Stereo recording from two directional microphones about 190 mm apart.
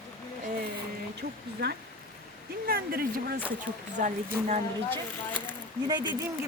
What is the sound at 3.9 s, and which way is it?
Speech, 40° right (ahead or behind).